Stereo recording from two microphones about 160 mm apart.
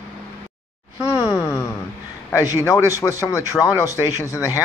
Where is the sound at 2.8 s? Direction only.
20° left (ahead or behind).